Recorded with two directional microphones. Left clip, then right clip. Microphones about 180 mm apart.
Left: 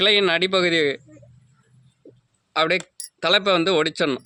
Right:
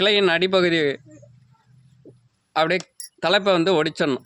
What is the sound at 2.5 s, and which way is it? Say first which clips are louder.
A man's voice: even; 40° right (ahead or behind).